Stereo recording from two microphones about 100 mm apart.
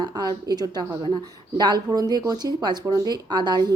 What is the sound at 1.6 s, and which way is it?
A woman's voice, 45° right (ahead or behind).